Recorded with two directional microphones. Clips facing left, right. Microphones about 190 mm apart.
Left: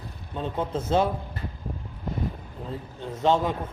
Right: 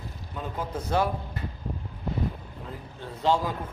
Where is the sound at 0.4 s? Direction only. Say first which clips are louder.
Left 4 dB; 25° left (ahead or behind).